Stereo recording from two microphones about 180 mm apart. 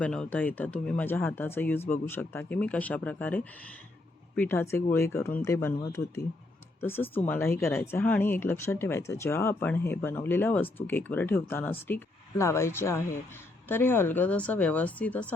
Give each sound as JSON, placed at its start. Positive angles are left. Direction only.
{"t": 0.0, "sound": "speech", "side_deg": 5}